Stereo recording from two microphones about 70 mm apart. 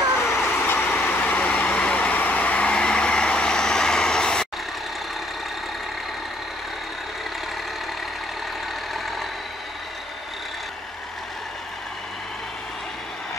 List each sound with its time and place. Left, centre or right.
0.2 s vehicle: left; by 4.5 s centre